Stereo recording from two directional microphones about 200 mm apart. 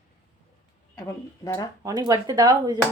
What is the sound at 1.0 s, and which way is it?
Speech, 15° left (ahead or behind).